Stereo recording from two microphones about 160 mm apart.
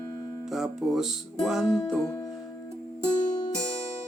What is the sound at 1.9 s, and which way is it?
Music, 10° left (ahead or behind).